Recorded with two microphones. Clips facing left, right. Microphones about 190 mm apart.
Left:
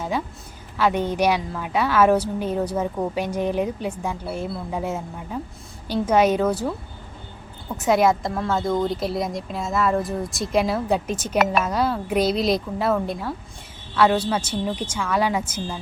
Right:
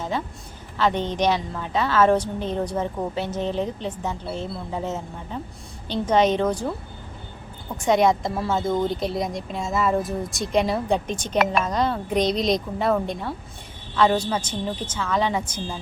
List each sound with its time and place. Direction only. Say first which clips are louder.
0.8 s a woman's voice: left 2 dB; 10° left (ahead or behind)
7.8 s a woman's voice: even; 5° left (ahead or behind)